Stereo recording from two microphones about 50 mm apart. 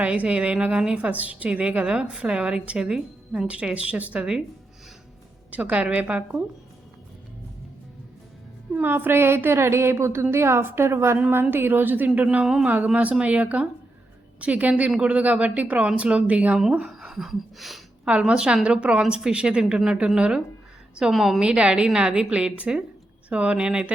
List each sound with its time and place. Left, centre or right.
0.0 s a woman's voice: right
0.9 s a woman's voice: right
5.5 s a woman's voice: right
8.7 s a woman's voice: right
11.5 s a woman's voice: right
14.8 s a woman's voice: centre
16.8 s a sound: centre
17.2 s a sound: centre
18.0 s a woman's voice: centre
21.1 s a woman's voice: centre
21.4 s a woman's voice: right